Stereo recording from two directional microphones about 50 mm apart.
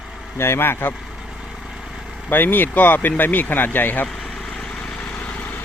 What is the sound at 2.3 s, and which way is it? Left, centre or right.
Speech, left.